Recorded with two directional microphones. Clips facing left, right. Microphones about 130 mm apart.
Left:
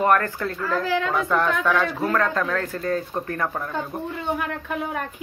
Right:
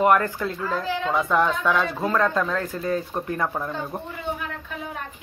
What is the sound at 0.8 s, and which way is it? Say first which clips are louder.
Speech: left 4 dB; 85° left.